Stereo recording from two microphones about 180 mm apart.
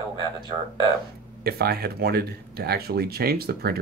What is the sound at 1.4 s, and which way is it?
Speech, 60° right (ahead or behind).